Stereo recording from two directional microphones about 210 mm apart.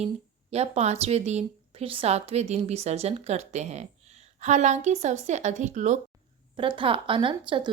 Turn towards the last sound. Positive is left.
turn(degrees=-25)  # may be behind; listen again after turning